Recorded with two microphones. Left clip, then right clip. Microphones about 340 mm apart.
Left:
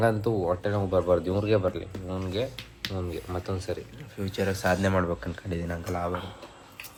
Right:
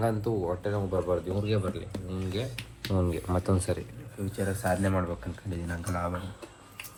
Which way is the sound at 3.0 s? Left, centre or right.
Centre.